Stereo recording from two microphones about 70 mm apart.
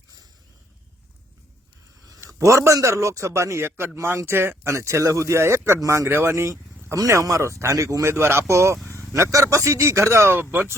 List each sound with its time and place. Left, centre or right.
2.0 s a man's voice: right
6.1 s a man's voice: right